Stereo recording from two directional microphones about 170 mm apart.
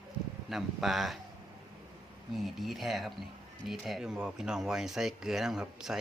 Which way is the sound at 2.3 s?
Centre (ahead or behind).